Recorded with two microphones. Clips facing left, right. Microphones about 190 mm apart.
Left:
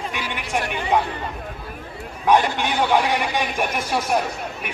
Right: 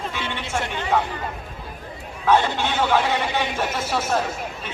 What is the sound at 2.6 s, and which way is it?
A man's voice, 15° left (ahead or behind).